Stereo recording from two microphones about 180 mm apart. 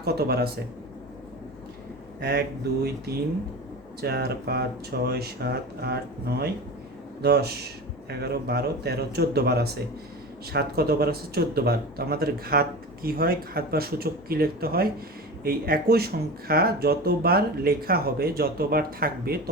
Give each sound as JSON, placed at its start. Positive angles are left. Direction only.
{"t": 0.0, "sound": "speech", "side_deg": -60}
{"t": 3.1, "sound": "speech", "side_deg": -60}